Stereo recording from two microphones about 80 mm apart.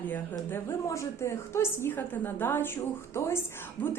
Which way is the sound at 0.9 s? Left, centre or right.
Left.